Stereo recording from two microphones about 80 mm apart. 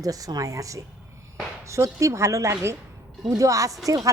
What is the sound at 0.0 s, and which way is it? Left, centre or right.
A woman's voice, right.